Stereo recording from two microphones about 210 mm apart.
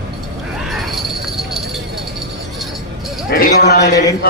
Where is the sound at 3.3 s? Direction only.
45° left (ahead or behind).